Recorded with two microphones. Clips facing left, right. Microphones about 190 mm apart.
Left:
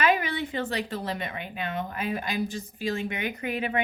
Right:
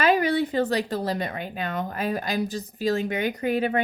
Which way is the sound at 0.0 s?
35° right (ahead or behind).